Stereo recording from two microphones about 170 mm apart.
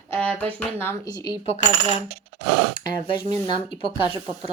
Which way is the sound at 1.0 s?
25° left (ahead or behind).